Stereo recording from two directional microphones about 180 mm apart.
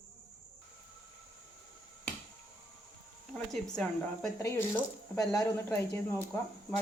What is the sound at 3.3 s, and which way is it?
Speech, 5° left (ahead or behind).